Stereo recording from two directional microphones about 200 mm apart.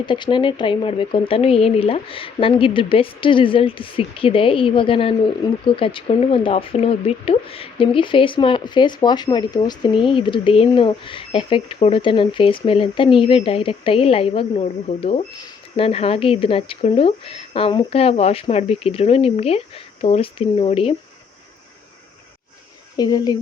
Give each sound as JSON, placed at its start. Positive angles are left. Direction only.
{"t": 0.0, "sound": "speech", "side_deg": 25}
{"t": 23.0, "sound": "speech", "side_deg": 20}